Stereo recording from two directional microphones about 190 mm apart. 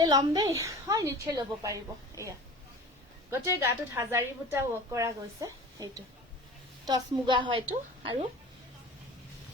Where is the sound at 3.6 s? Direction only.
10° right (ahead or behind).